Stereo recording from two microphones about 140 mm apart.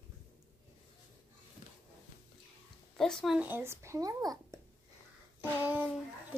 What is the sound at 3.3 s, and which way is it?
A child's voice, 15° right (ahead or behind).